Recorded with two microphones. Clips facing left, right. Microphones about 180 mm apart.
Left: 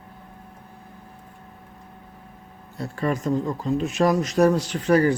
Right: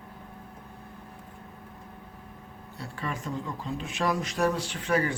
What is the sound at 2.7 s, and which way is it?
Speech, 45° left (ahead or behind).